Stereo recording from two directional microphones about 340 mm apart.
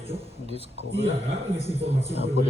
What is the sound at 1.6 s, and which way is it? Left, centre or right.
Speech, centre.